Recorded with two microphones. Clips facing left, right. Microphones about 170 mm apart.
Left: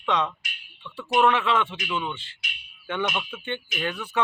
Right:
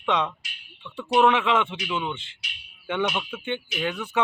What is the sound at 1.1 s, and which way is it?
Speech, 15° right (ahead or behind).